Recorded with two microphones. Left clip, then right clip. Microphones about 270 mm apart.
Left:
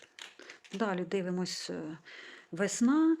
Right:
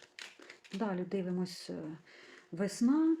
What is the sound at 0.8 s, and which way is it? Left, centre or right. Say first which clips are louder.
Speech: left 4 dB; left.